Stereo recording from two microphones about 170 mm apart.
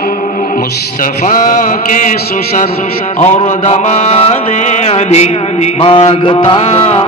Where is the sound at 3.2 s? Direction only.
40° left (ahead or behind).